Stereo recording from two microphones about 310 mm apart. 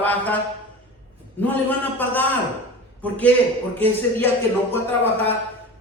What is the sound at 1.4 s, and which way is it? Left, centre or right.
Speech, centre.